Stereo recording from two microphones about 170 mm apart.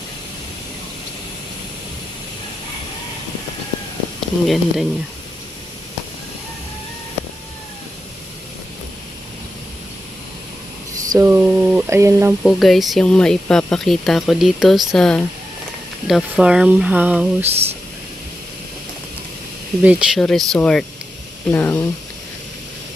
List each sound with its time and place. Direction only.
4.4 s speech: centre (ahead or behind)
11.1 s a sound: 15° right (ahead or behind)
12.4 s speech: centre (ahead or behind)
17.4 s speech: 35° right (ahead or behind)
19.8 s speech: 5° right (ahead or behind)
20.2 s speech: 5° left (ahead or behind)